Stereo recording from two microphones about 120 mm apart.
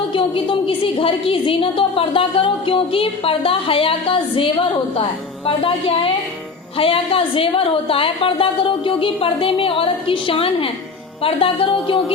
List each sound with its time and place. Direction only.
0.1 s a woman's voice: 45° left (ahead or behind)
5.5 s a woman's voice: 45° left (ahead or behind)